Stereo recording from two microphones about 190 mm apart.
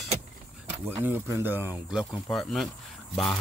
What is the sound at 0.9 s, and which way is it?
Speech, 10° right (ahead or behind).